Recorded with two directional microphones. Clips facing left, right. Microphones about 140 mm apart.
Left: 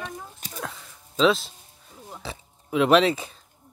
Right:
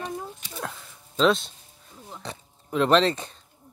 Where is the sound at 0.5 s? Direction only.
Centre (ahead or behind).